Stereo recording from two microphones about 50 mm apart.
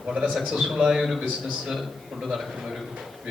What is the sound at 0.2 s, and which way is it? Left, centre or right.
A man's voice, centre.